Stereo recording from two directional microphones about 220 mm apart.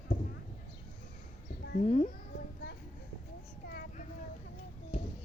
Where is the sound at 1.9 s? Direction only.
30° left (ahead or behind).